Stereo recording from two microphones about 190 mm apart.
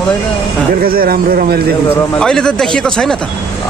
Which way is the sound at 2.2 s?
5° left (ahead or behind).